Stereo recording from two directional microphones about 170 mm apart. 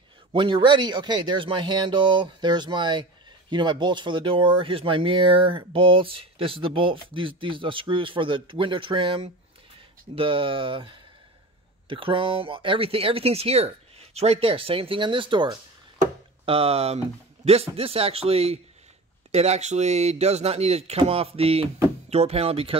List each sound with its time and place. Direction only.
0.3 s speech: 30° right (ahead or behind)